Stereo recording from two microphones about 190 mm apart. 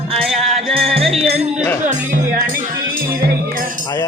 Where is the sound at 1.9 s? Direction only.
45° right (ahead or behind).